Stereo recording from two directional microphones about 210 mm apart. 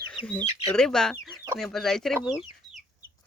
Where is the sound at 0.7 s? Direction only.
5° left (ahead or behind).